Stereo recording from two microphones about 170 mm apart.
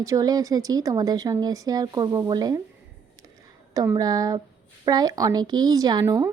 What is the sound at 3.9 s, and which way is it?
A woman's voice, 20° right (ahead or behind).